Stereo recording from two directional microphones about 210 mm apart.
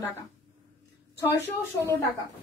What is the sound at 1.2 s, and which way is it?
Speech, 15° left (ahead or behind).